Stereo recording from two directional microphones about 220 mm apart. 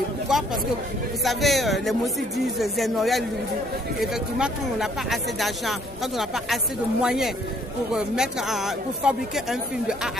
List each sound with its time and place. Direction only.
0.3 s speech: centre (ahead or behind)